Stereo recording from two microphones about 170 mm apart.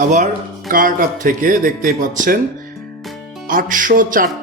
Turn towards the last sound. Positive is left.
turn(degrees=-55)  # may be behind; listen again after turning